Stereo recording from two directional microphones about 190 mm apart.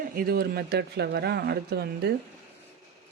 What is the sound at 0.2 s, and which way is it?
Speech, 55° right (ahead or behind).